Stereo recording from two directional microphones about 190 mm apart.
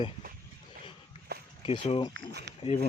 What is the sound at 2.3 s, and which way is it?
Speech, 60° right (ahead or behind).